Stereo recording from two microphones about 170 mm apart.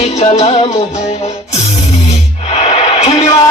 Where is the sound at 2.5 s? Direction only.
40° left (ahead or behind).